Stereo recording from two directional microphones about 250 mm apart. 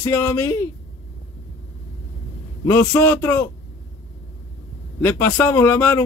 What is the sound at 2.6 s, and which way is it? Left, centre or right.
Speech, centre.